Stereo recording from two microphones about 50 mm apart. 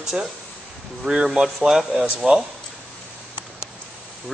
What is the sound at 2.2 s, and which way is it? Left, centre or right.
Speech, right.